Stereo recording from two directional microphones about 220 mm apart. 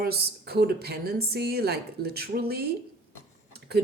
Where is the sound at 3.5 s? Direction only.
45° right (ahead or behind).